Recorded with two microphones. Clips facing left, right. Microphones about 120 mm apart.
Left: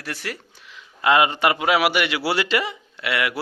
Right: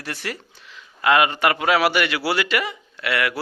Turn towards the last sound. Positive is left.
turn(degrees=20)  # may be behind; listen again after turning